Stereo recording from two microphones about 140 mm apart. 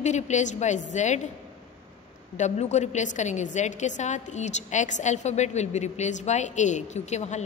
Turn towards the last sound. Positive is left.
turn(degrees=55)  # may be behind; listen again after turning